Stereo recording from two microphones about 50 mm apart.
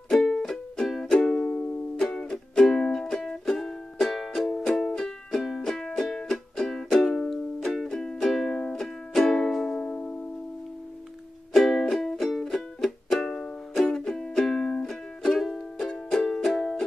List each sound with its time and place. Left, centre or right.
0.1 s music: centre
1.1 s music: centre
11.5 s music: centre
13.2 s music: centre